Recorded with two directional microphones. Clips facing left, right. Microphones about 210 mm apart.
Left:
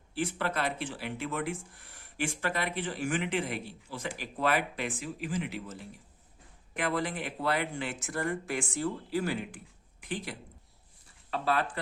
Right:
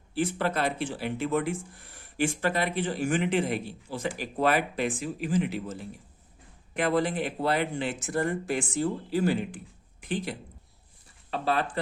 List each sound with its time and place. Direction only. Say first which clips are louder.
0.1 s speech: right 5 dB; 30° right (ahead or behind)